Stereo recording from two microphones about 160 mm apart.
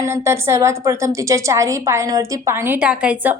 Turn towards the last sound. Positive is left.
turn(degrees=-10)  # may be behind; listen again after turning